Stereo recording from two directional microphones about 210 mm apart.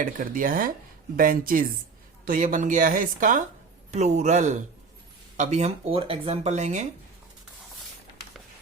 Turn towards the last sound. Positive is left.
turn(degrees=-35)  # may be behind; listen again after turning